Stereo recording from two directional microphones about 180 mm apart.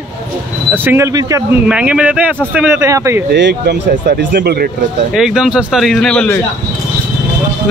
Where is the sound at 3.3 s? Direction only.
70° right (ahead or behind).